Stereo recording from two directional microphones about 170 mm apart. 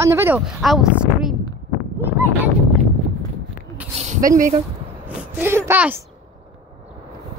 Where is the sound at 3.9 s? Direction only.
45° right (ahead or behind).